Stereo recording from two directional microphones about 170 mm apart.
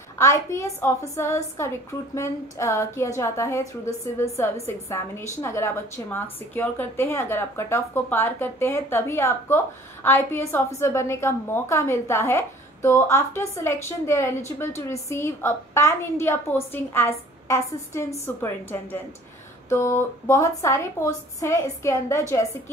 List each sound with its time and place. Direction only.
0.2 s a woman's voice: 15° left (ahead or behind)